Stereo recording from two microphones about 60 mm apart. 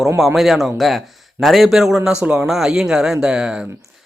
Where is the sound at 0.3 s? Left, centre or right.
Centre.